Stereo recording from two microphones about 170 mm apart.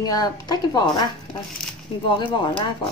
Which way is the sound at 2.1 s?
30° left (ahead or behind).